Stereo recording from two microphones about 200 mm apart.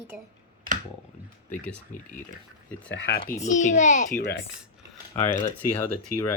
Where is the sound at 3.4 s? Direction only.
40° left (ahead or behind).